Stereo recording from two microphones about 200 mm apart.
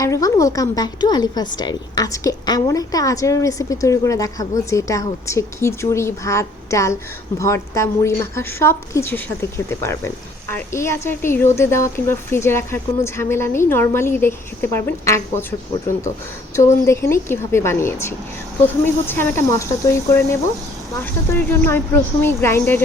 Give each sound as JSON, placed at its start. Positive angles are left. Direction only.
{"t": 0.0, "sound": "a woman's voice", "side_deg": 15}
{"t": 16.6, "sound": "a woman's voice", "side_deg": 15}